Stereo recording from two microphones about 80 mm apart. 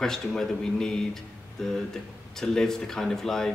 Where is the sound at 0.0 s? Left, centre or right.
Centre.